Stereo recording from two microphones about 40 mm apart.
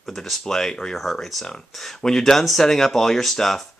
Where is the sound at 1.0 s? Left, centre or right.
Centre.